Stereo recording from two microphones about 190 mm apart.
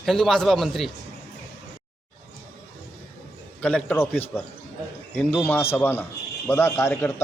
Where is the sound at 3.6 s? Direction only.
5° left (ahead or behind).